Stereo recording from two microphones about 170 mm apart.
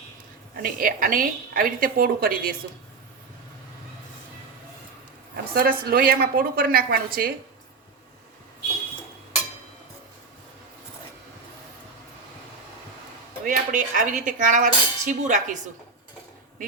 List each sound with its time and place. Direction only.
0.5 s a woman's voice: 55° right (ahead or behind)
5.5 s a woman's voice: 60° right (ahead or behind)
13.4 s speech: 50° right (ahead or behind)